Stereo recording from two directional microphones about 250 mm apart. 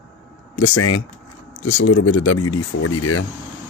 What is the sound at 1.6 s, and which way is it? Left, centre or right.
Speech, left.